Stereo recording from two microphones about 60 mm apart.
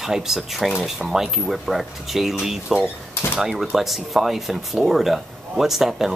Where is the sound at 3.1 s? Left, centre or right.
Left.